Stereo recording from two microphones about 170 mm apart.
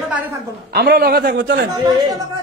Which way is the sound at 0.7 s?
70° right (ahead or behind).